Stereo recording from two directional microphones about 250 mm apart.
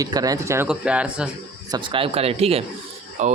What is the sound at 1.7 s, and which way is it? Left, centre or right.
Speech, right.